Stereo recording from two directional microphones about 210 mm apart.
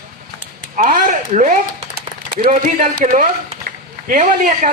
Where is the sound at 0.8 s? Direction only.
40° right (ahead or behind).